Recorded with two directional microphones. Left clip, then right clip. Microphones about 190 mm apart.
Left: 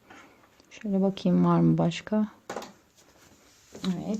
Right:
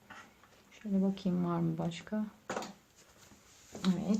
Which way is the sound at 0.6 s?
50° left (ahead or behind).